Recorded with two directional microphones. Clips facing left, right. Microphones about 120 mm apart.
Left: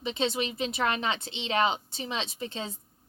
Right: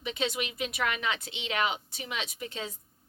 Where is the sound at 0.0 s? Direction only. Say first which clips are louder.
Left 3 dB; 30° left (ahead or behind).